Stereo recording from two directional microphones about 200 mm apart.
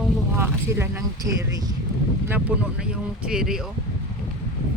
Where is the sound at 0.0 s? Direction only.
10° right (ahead or behind).